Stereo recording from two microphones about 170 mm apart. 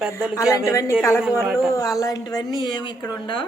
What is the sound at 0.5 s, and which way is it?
A woman's voice, 15° left (ahead or behind).